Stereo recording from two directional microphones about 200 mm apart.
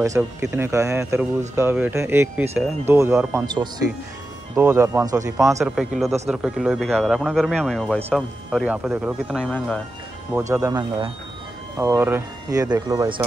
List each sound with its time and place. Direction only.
0.0 s speech: 15° right (ahead or behind)
5.8 s speech: centre (ahead or behind)
9.4 s speech: 5° left (ahead or behind)
10.5 s speech: 15° right (ahead or behind)